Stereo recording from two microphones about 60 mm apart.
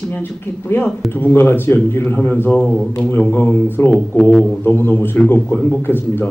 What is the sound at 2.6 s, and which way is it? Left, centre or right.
Music, centre.